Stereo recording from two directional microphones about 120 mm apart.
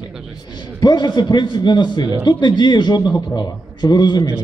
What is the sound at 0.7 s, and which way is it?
A man's voice, 35° left (ahead or behind).